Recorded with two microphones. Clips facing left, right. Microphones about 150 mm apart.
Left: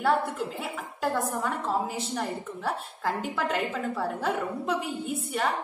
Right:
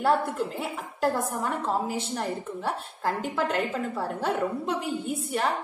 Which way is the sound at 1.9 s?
Centre (ahead or behind).